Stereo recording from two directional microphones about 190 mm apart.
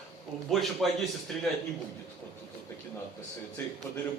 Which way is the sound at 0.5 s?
Centre (ahead or behind).